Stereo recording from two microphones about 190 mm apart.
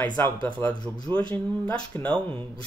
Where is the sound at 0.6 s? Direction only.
20° left (ahead or behind).